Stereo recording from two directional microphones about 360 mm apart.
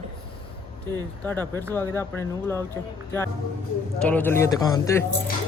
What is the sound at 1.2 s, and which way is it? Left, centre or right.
Speech, centre.